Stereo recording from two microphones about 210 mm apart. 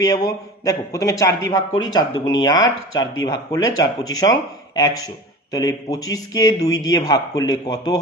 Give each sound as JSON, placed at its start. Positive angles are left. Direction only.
{"t": 0.0, "sound": "speech", "side_deg": 15}